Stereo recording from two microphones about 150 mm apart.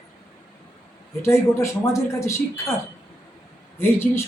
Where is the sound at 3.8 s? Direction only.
15° left (ahead or behind).